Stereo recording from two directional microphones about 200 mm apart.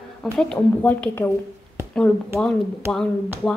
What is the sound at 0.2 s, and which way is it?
Speech, 5° left (ahead or behind).